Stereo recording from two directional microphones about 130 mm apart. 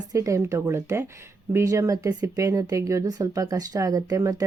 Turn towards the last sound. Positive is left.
turn(degrees=-25)  # may be behind; listen again after turning